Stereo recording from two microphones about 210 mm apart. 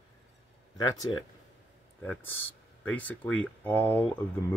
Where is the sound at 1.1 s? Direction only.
20° left (ahead or behind).